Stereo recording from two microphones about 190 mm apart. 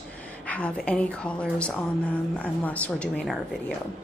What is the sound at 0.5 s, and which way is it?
A woman's voice, 5° left (ahead or behind).